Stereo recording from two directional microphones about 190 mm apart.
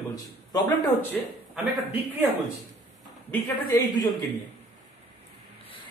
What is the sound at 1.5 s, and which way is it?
Speech, 5° right (ahead or behind).